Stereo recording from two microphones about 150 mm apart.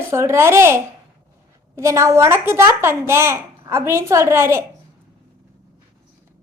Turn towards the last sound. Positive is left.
turn(degrees=-15)  # may be behind; listen again after turning